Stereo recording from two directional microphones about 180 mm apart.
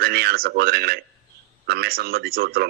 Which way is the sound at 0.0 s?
60° right (ahead or behind).